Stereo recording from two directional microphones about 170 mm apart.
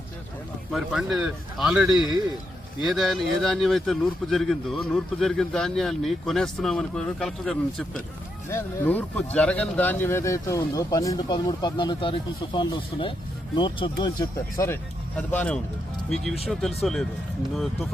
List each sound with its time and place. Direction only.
0.7 s speech: centre (ahead or behind)
8.4 s speech: 15° left (ahead or behind)
14.6 s speech: 10° left (ahead or behind)